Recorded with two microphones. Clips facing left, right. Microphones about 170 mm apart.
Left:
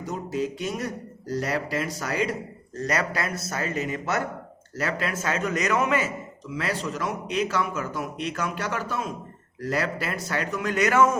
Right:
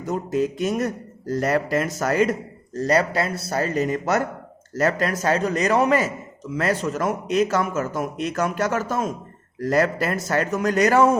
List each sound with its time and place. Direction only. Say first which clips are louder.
0.0 s a man's voice: right 5 dB; 50° right (ahead or behind)
2.7 s a man's voice: right 7 dB; 35° right (ahead or behind)